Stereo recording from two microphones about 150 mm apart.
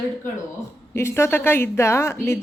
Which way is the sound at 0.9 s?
15° left (ahead or behind).